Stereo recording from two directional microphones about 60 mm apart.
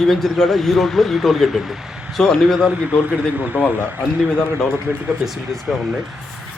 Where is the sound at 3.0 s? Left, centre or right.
Right.